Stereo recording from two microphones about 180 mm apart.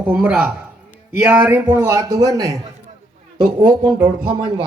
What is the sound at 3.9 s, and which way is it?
Speech, 5° right (ahead or behind).